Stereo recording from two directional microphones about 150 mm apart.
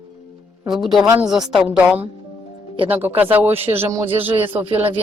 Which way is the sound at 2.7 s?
40° right (ahead or behind).